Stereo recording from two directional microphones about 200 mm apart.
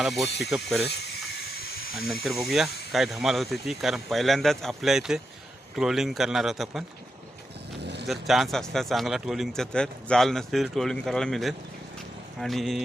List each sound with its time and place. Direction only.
0.0 s a man's voice: centre (ahead or behind)
0.3 s speech: 60° left (ahead or behind)
0.9 s hiss: 55° left (ahead or behind)
2.2 s a man's voice: centre (ahead or behind)
7.8 s vehicle: 55° right (ahead or behind)
8.0 s a man's voice: centre (ahead or behind)